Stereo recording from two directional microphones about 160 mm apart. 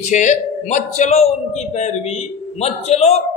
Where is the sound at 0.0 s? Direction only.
50° left (ahead or behind).